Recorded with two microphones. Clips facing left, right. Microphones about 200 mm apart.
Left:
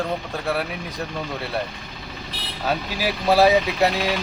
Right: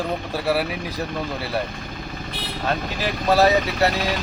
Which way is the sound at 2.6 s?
10° left (ahead or behind).